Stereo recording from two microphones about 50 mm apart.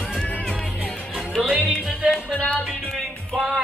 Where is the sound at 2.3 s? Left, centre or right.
Left.